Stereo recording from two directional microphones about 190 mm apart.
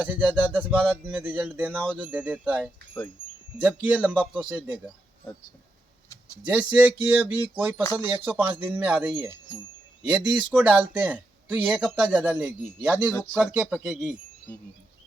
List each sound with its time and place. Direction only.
0.0 s speech: 10° right (ahead or behind)
6.1 s a sound: 15° left (ahead or behind)
6.4 s speech: 5° right (ahead or behind)
10.5 s speech: 10° right (ahead or behind)